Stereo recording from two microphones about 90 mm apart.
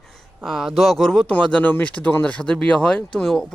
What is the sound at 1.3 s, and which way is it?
Speech, 15° left (ahead or behind).